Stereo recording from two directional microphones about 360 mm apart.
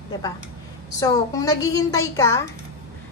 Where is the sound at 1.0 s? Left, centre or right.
Centre.